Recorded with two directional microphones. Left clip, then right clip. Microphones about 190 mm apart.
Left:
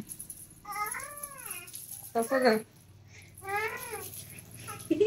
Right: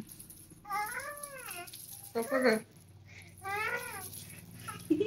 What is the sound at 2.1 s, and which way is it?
Speech, 40° left (ahead or behind).